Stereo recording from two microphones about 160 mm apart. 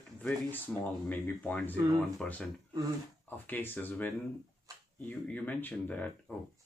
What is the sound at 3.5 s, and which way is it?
Speech, 10° left (ahead or behind).